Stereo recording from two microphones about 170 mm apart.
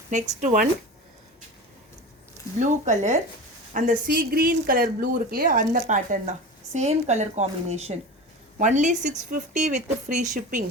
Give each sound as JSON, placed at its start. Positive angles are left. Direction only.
{"t": 0.1, "sound": "speech", "side_deg": -50}
{"t": 2.6, "sound": "speech", "side_deg": -45}